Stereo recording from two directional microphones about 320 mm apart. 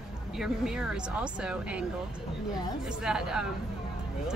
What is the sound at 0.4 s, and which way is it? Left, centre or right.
Speech, centre.